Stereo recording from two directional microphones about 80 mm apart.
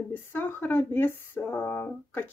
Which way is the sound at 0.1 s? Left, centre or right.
Left.